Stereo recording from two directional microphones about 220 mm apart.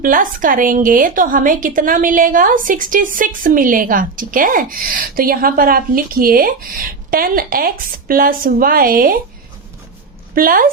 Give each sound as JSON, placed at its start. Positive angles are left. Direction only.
{"t": 0.0, "sound": "a woman's voice", "side_deg": -40}
{"t": 10.3, "sound": "a woman's voice", "side_deg": -40}